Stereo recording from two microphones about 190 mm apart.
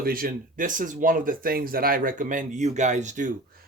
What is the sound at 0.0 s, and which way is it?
Speech, 50° right (ahead or behind).